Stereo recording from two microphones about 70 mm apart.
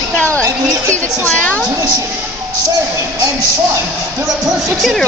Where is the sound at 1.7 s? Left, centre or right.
Right.